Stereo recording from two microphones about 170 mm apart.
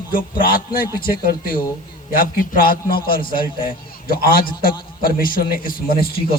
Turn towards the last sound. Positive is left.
turn(degrees=65)  # may be behind; listen again after turning